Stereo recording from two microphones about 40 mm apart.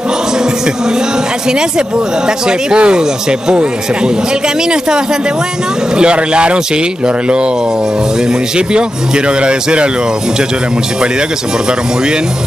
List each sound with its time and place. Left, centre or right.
2.2 s speech: right
4.6 s speech: right
8.3 s speech: right